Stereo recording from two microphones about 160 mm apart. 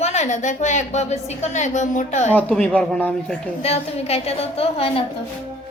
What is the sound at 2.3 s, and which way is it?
Speech, 5° left (ahead or behind).